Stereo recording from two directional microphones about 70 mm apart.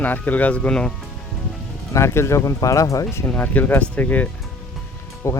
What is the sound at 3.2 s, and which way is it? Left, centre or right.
Speech, left.